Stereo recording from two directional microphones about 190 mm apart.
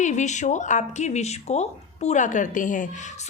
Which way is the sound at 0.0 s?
40° left (ahead or behind).